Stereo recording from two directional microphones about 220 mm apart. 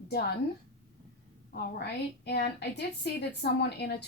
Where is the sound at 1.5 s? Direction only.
45° left (ahead or behind).